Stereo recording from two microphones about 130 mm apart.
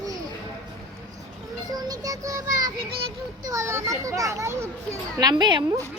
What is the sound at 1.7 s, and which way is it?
A child's voice, 30° right (ahead or behind).